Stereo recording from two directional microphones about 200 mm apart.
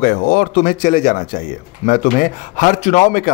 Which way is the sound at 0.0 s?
45° left (ahead or behind).